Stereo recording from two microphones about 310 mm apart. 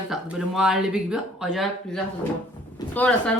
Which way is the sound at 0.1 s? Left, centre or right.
Centre.